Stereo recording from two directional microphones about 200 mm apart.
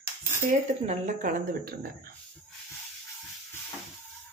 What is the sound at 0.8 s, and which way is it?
Speech, 35° right (ahead or behind).